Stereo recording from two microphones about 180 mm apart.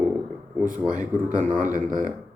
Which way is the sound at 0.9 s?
45° right (ahead or behind).